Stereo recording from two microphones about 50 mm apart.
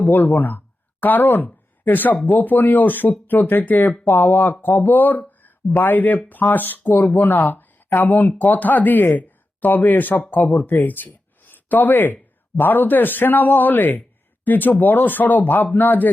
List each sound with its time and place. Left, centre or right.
0.0 s speech: left